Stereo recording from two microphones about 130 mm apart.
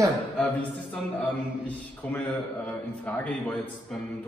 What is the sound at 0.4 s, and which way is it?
A man's voice, 10° left (ahead or behind).